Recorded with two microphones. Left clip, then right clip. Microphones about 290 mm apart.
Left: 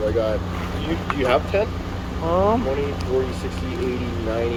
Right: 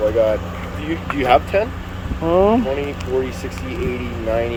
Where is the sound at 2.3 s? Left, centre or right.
Right.